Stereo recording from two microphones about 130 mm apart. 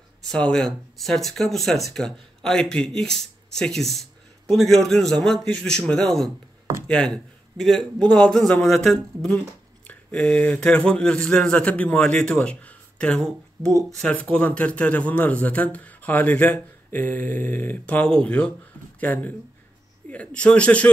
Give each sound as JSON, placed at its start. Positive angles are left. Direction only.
{"t": 0.2, "sound": "a man's voice", "side_deg": 5}